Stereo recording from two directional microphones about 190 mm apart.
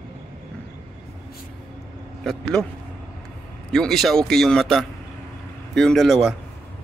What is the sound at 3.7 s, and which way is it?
A man's voice, centre (ahead or behind).